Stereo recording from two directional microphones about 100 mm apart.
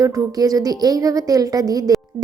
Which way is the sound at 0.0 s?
35° right (ahead or behind).